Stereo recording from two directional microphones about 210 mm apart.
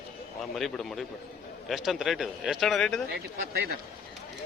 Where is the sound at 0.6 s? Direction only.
Centre (ahead or behind).